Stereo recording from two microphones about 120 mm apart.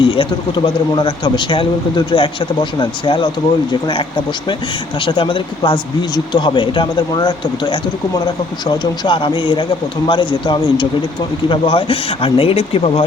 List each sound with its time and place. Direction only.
0.0 s speech: 40° left (ahead or behind)